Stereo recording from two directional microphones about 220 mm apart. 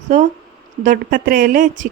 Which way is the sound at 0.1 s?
35° right (ahead or behind).